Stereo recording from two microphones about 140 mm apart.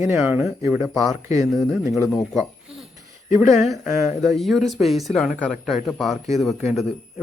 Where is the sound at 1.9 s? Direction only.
25° left (ahead or behind).